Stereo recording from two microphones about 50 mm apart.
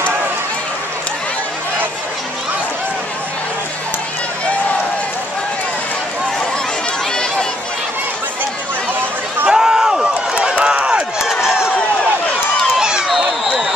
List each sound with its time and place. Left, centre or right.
9.5 s run: centre
12.7 s run: centre
13.1 s a sound: centre